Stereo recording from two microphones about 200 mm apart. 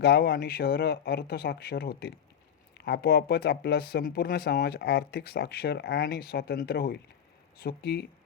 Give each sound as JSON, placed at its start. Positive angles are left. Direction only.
{"t": 0.0, "sound": "speech", "side_deg": 55}